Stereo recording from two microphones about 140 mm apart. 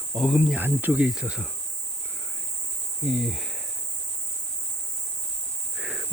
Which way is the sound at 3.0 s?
Centre (ahead or behind).